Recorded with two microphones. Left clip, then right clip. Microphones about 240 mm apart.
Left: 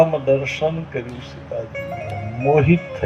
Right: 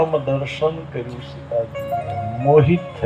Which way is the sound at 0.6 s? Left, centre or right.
Left.